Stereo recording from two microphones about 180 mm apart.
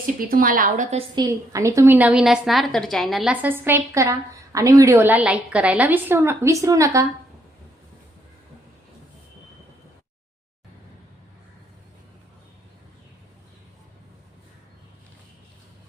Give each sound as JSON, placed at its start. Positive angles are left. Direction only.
{"t": 0.2, "sound": "a woman's voice", "side_deg": -50}
{"t": 1.1, "sound": "a woman's voice", "side_deg": -20}